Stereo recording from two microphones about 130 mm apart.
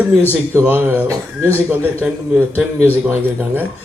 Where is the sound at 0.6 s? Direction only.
15° right (ahead or behind).